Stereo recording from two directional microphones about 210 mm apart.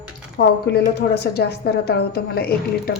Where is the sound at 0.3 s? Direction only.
50° left (ahead or behind).